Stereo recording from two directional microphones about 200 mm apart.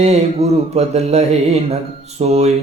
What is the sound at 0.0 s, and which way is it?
Speech, 30° right (ahead or behind).